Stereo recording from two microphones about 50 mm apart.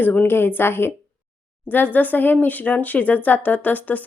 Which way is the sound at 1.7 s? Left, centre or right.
Left.